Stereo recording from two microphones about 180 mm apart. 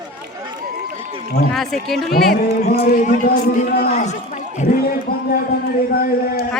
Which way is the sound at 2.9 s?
50° left (ahead or behind).